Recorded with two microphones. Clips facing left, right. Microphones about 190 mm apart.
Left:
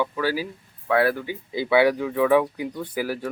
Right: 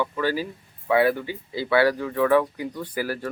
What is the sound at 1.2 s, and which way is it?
Speech, 15° left (ahead or behind).